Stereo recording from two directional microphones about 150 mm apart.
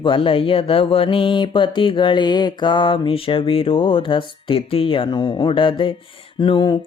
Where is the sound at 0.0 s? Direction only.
35° left (ahead or behind).